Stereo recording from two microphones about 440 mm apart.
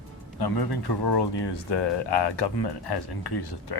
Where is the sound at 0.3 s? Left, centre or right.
Left.